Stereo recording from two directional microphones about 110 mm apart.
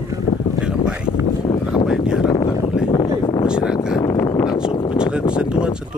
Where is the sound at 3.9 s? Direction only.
30° left (ahead or behind).